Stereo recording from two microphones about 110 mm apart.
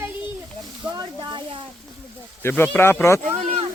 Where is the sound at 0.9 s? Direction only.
40° right (ahead or behind).